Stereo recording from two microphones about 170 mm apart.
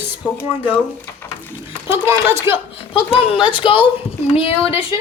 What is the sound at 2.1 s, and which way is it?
Speech, 15° right (ahead or behind).